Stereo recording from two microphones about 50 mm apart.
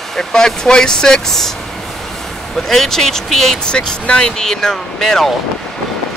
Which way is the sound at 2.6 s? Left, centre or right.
Centre.